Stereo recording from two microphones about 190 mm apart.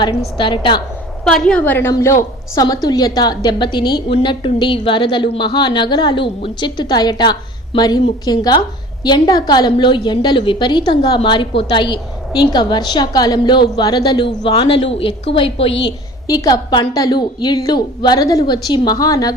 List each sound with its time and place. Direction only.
0.0 s a woman's voice: 25° left (ahead or behind)
1.2 s a woman's voice: 5° left (ahead or behind)